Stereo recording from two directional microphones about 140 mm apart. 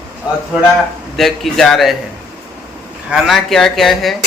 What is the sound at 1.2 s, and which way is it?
Speech, centre (ahead or behind).